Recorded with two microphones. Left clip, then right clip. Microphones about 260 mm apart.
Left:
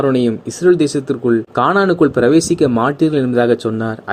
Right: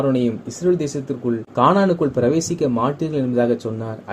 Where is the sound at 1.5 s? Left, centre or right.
Left.